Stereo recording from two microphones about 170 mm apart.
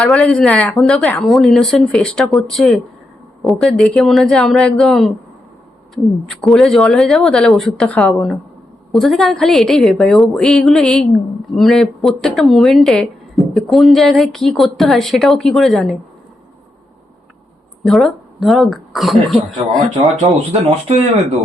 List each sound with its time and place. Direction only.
0.0 s speech: 5° left (ahead or behind)
6.4 s speech: centre (ahead or behind)
17.8 s speech: centre (ahead or behind)
20.0 s speech: 40° right (ahead or behind)